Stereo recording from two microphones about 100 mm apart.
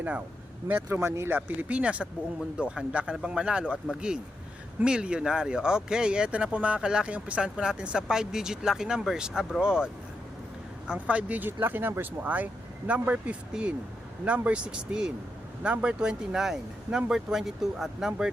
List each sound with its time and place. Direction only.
0.7 s speech: 20° right (ahead or behind); by 18.3 s 5° right (ahead or behind)